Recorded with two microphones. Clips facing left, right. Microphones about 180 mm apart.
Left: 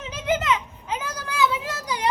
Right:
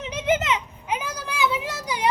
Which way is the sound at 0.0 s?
20° right (ahead or behind).